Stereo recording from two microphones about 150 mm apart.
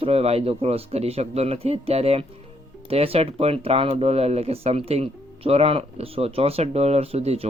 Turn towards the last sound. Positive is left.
turn(degrees=-45)  # may be behind; listen again after turning